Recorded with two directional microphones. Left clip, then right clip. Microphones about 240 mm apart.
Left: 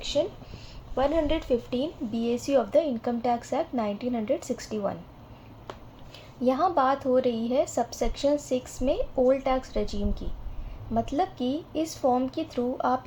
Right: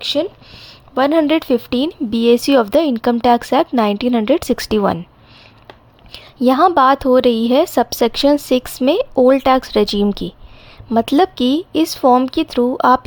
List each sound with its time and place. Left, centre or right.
0.0 s a sound: right
0.9 s speech: right
6.4 s speech: right